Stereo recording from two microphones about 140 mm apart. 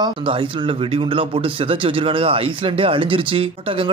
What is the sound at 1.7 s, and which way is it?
Speech, 40° right (ahead or behind).